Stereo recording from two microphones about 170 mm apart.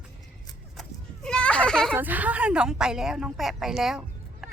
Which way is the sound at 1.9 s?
10° right (ahead or behind).